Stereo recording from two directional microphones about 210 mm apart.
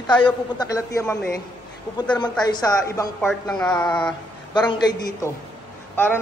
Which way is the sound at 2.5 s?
15° left (ahead or behind).